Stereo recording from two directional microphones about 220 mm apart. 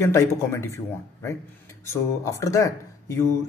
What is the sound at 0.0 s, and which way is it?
Speech, 10° left (ahead or behind).